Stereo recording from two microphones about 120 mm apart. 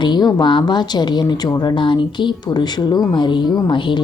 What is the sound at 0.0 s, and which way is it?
A woman's voice, 35° left (ahead or behind).